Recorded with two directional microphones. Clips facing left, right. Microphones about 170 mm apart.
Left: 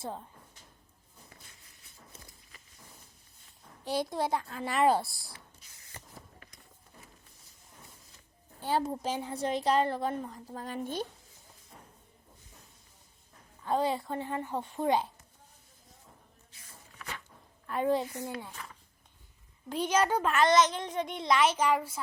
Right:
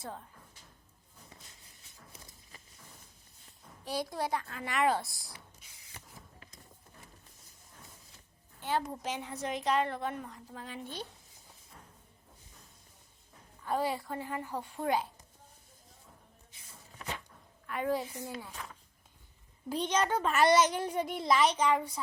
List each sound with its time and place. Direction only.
3.8 s a woman's voice: 25° left (ahead or behind)
8.6 s a woman's voice: 30° left (ahead or behind); by 11.0 s 45° left (ahead or behind)
13.7 s a woman's voice: 20° left (ahead or behind)
17.7 s a woman's voice: 30° left (ahead or behind)
19.6 s speech: 5° left (ahead or behind)
20.3 s a child's voice: 10° right (ahead or behind)